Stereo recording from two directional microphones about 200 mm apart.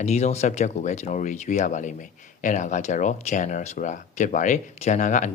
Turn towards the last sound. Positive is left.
turn(degrees=40)  # may be behind; listen again after turning